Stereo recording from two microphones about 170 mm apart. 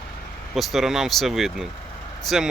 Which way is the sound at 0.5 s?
Centre (ahead or behind).